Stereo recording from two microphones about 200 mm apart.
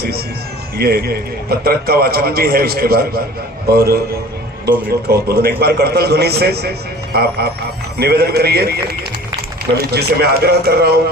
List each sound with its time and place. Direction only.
0.8 s a man's voice: 50° right (ahead or behind)